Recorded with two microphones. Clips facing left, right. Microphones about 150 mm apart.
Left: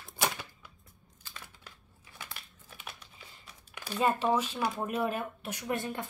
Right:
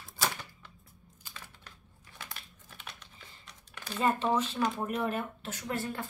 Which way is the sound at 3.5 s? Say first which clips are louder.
Left 2 dB; 15° left (ahead or behind).